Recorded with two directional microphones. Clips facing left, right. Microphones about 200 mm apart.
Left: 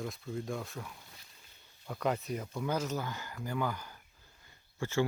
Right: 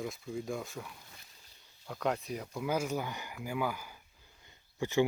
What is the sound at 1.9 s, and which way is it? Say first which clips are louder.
Speech: left 1 dB; centre (ahead or behind).